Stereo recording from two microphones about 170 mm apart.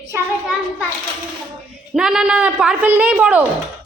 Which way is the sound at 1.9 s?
5° right (ahead or behind).